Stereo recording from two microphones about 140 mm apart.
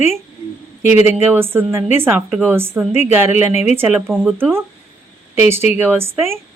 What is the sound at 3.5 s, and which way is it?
Speech, 50° left (ahead or behind).